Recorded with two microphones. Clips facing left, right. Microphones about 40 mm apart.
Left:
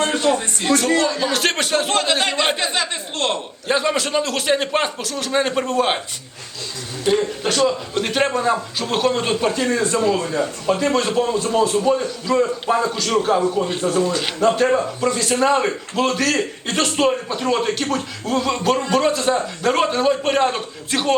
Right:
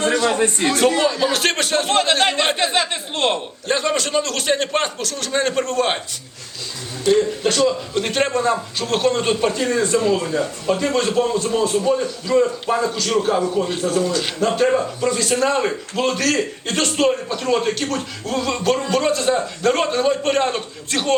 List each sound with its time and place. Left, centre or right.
0.3 s a man's voice: right
1.1 s a man's voice: centre
3.7 s a man's voice: centre
7.0 s a man's voice: centre